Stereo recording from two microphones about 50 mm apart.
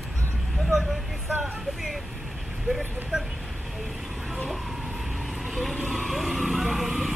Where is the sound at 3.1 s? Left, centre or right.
Centre.